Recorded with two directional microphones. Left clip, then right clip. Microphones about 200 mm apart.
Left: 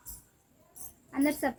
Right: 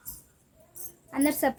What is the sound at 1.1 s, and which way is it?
Speech, 60° right (ahead or behind).